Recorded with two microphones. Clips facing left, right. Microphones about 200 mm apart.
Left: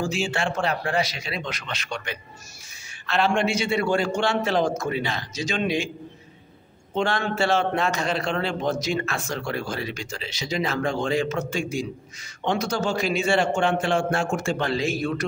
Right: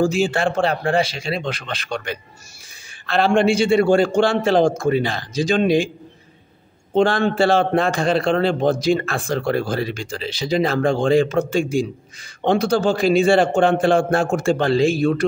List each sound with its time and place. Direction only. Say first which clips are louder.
0.0 s speech: right 8 dB; 40° right (ahead or behind)
3.1 s speech: right 6 dB; 35° right (ahead or behind)
6.9 s speech: right 8 dB; 35° right (ahead or behind)